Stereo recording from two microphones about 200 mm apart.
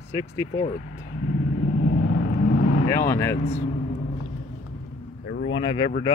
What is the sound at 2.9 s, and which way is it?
Speech, 15° left (ahead or behind).